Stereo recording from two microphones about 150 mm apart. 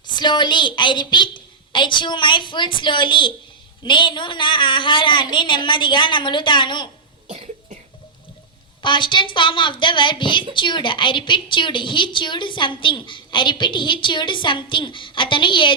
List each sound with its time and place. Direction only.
0.1 s a woman's voice: 30° left (ahead or behind)
7.3 s cough: 45° right (ahead or behind)
8.8 s a woman's voice: 30° left (ahead or behind)